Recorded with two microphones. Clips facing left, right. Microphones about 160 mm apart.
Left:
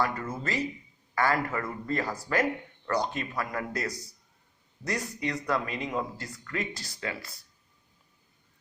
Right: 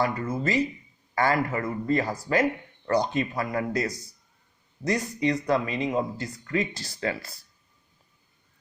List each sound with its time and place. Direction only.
0.0 s speech: 15° right (ahead or behind)